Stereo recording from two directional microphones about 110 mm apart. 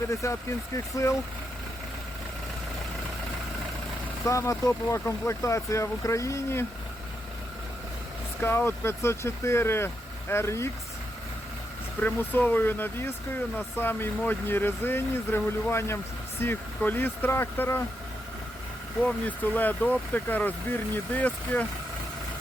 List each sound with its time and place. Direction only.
0.1 s speech: 30° left (ahead or behind)
4.3 s speech: 30° left (ahead or behind)
8.4 s speech: 20° left (ahead or behind)
11.9 s speech: 15° left (ahead or behind)
19.0 s speech: 15° left (ahead or behind)